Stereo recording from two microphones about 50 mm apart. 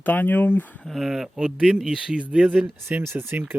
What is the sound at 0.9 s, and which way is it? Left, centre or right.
Speech, centre.